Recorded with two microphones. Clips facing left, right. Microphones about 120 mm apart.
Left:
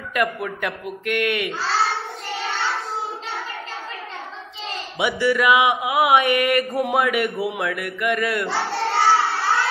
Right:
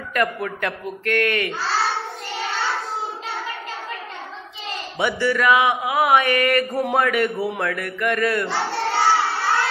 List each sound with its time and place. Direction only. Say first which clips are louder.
0.1 s a man's voice: even; 5° left (ahead or behind)
1.0 s child singing: right 1 dB; 5° left (ahead or behind)
4.9 s speech: left 1 dB; 5° left (ahead or behind)
5.6 s mantra: left 1 dB; 20° left (ahead or behind)
6.9 s a man's voice: right 1 dB; 10° left (ahead or behind)
8.9 s crowd: left 1 dB; centre (ahead or behind)